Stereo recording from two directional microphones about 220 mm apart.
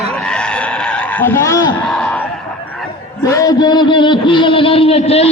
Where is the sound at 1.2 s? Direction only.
10° left (ahead or behind).